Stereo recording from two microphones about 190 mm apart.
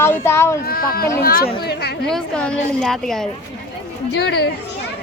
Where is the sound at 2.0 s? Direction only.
5° left (ahead or behind).